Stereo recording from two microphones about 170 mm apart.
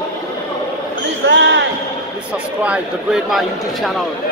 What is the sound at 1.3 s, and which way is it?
Basketball bounce, 90° right.